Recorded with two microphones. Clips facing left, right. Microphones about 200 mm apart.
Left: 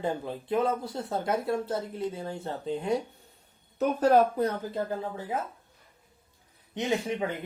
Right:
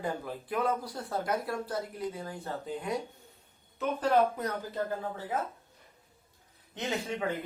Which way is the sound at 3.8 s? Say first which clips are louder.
Left 5 dB; 40° left (ahead or behind).